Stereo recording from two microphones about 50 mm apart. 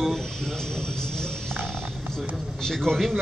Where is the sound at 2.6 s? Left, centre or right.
Centre.